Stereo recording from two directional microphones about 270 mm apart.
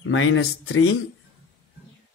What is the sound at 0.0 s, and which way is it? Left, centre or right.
Speech, left.